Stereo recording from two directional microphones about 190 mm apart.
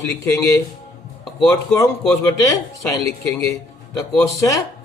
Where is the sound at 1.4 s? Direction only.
15° left (ahead or behind).